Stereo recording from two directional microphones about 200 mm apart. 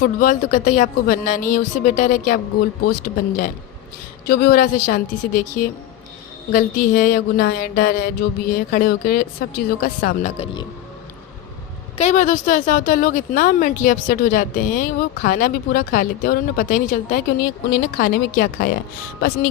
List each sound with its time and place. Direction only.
0.0 s speech: 45° left (ahead or behind)
10.3 s speech: 25° left (ahead or behind)
11.9 s speech: 35° left (ahead or behind)